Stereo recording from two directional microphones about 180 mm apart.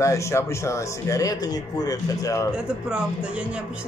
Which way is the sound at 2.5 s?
5° right (ahead or behind).